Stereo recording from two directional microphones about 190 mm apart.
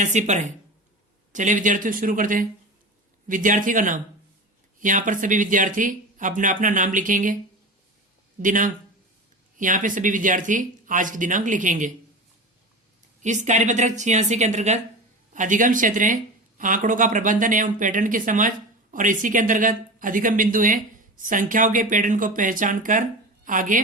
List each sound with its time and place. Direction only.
0.0 s a woman's voice: 40° right (ahead or behind)
8.4 s speech: 45° right (ahead or behind)
13.2 s a woman's voice: 40° right (ahead or behind)